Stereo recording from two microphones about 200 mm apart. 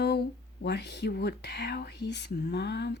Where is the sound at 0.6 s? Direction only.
55° left (ahead or behind).